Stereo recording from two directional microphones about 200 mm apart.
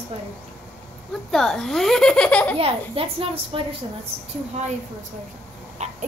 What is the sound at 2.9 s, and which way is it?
Speech, 30° right (ahead or behind).